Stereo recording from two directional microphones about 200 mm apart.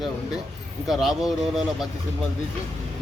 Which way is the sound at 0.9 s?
Centre (ahead or behind).